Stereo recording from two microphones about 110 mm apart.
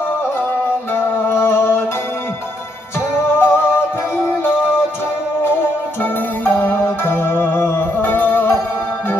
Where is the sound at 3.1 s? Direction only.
20° left (ahead or behind).